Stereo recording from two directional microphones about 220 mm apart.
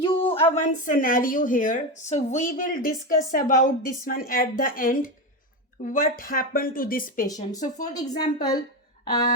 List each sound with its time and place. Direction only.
0.0 s a sound: 25° left (ahead or behind)
0.4 s a woman's voice: 35° left (ahead or behind)
7.3 s a woman's voice: 15° left (ahead or behind)